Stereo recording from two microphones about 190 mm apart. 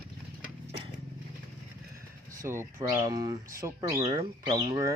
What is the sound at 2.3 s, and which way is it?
Speech, 15° right (ahead or behind).